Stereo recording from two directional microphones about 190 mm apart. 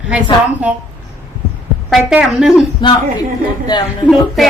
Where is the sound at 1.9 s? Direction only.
5° right (ahead or behind).